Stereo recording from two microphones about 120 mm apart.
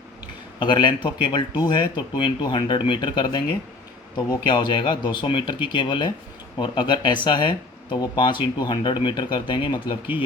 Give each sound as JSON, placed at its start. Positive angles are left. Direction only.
{"t": 0.6, "sound": "speech", "side_deg": 40}